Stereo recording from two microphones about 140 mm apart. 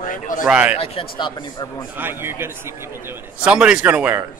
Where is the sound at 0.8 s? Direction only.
35° left (ahead or behind).